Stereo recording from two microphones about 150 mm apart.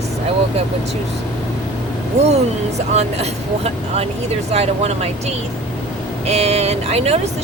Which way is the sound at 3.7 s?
45° right (ahead or behind).